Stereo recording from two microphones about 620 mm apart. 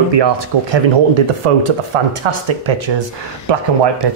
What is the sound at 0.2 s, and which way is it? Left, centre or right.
Speech, right.